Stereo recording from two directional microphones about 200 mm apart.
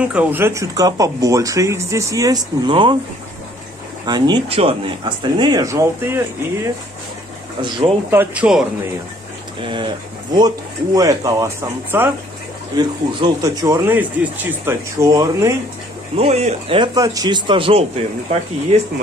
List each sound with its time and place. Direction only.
0.0 s speech: 5° right (ahead or behind); by 3.0 s 25° right (ahead or behind)
4.0 s speech: 20° right (ahead or behind)
8.1 s speech: 10° right (ahead or behind)
9.6 s speech: 25° right (ahead or behind)
16.2 s speech: 35° right (ahead or behind)